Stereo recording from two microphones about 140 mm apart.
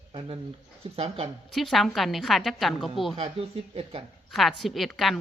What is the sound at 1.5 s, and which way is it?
Speech, centre (ahead or behind).